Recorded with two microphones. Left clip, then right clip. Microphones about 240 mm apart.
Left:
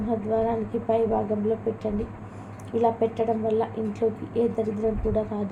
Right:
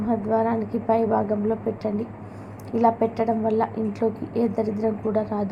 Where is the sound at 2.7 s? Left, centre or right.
Centre.